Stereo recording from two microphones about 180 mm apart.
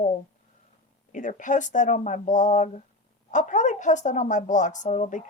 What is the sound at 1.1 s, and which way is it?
A woman's voice, 45° left (ahead or behind).